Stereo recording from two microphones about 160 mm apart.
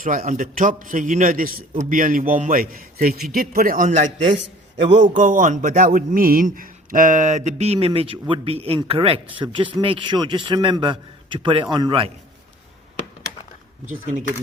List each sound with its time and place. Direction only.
0.0 s a man's voice: 55° right (ahead or behind); by 12.1 s 35° right (ahead or behind)
13.8 s speech: 50° right (ahead or behind)